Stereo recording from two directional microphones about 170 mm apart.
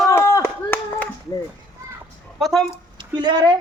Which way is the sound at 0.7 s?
10° left (ahead or behind).